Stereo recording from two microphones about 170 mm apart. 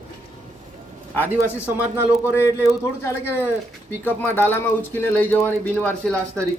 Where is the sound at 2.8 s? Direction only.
15° left (ahead or behind).